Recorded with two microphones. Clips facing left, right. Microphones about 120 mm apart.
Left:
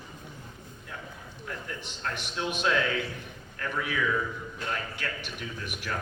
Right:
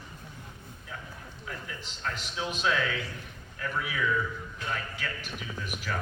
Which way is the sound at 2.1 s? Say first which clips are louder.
Left 2 dB; 65° left (ahead or behind).